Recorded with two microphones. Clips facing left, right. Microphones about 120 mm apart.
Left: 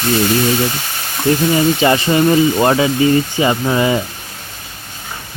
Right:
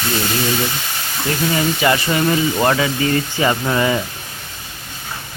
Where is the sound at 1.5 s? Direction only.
25° left (ahead or behind).